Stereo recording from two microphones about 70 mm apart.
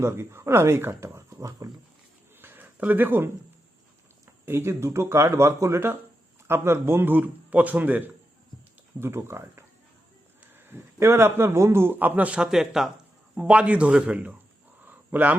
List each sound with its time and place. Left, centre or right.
0.0 s speech: right
2.4 s a sound: right
4.3 s a man's voice: right
9.0 s speech: right
11.0 s a man's voice: right; by 12.9 s centre
13.3 s a man's voice: centre
14.8 s a sound: right